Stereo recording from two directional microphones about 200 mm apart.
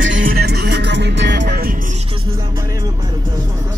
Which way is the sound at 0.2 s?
50° right (ahead or behind).